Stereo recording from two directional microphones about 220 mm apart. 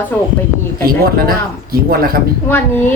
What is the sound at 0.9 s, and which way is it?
Speech, 45° right (ahead or behind).